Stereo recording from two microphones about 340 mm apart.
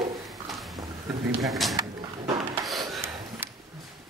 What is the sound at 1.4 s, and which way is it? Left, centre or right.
Speech, centre.